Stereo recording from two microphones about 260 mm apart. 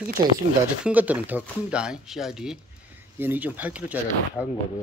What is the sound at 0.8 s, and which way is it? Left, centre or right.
Speech, centre.